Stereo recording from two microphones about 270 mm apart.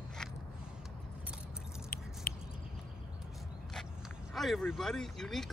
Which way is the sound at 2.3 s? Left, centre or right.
Left.